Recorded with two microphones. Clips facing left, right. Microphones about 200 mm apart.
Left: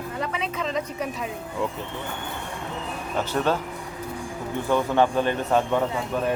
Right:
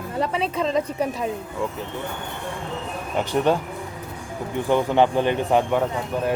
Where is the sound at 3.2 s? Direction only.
15° right (ahead or behind).